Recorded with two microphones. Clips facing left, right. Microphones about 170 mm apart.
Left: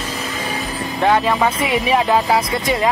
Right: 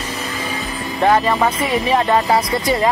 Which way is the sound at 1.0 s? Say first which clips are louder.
Right 1 dB; centre (ahead or behind).